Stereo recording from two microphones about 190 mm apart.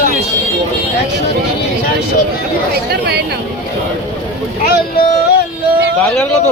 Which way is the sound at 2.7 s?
60° right (ahead or behind).